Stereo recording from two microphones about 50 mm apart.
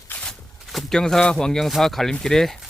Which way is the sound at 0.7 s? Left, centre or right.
Centre.